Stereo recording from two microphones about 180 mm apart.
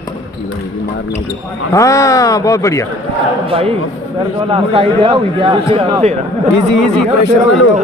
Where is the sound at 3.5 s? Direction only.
30° right (ahead or behind).